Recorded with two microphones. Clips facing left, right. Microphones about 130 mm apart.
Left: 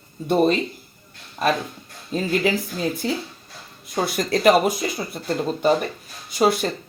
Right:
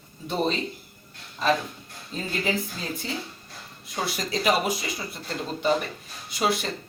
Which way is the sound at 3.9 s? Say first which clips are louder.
Left 7 dB; 50° left (ahead or behind).